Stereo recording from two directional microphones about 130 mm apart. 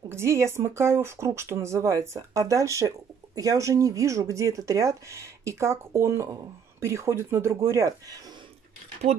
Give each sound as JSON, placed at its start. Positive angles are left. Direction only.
{"t": 0.1, "sound": "speech", "side_deg": -20}
{"t": 9.1, "sound": "speech", "side_deg": -55}